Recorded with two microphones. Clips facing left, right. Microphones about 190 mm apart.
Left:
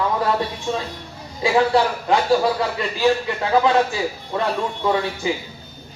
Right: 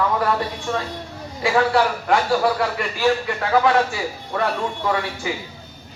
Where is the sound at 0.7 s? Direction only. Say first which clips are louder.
Even; 20° left (ahead or behind).